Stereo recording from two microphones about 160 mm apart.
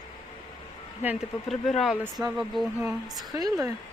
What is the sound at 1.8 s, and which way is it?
Speech, centre (ahead or behind).